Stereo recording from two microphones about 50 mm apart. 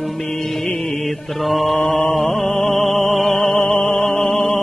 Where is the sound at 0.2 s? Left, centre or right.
Centre.